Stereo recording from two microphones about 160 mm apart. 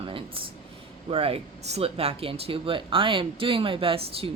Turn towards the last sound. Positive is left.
turn(degrees=-35)  # may be behind; listen again after turning